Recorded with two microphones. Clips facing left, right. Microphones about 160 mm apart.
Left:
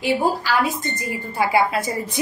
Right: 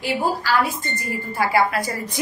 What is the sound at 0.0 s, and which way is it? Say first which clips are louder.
A woman's voice: left 2 dB; 20° left (ahead or behind).